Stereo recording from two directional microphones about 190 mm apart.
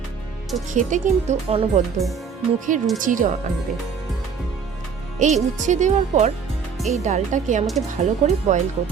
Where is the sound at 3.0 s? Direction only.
45° right (ahead or behind).